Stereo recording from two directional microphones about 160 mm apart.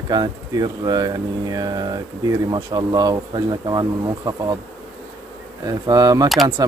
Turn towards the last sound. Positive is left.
turn(degrees=0)  # may be behind; listen again after turning